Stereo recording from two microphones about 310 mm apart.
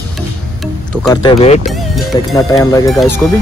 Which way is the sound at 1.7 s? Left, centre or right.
Centre.